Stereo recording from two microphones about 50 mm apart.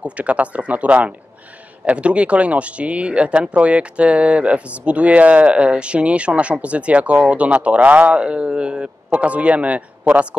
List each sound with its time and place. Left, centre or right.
0.0 s speech: right